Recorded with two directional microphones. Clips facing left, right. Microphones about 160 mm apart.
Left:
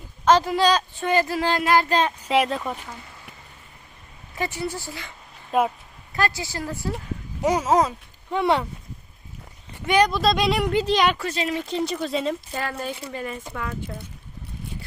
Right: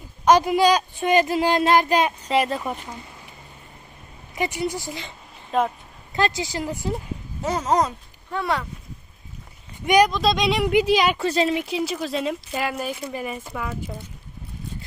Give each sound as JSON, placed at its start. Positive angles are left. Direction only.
{"t": 0.3, "sound": "speech", "side_deg": -15}
{"t": 2.2, "sound": "speech", "side_deg": 0}
{"t": 4.4, "sound": "speech", "side_deg": -15}
{"t": 5.5, "sound": "speech", "side_deg": 5}
{"t": 6.1, "sound": "speech", "side_deg": -20}
{"t": 7.4, "sound": "speech", "side_deg": 10}
{"t": 8.3, "sound": "speech", "side_deg": 25}
{"t": 9.8, "sound": "speech", "side_deg": -15}
{"t": 10.1, "sound": "speech", "side_deg": 5}
{"t": 10.7, "sound": "speech", "side_deg": -15}
{"t": 11.2, "sound": "a woman's voice", "side_deg": -30}
{"t": 11.5, "sound": "speech", "side_deg": -10}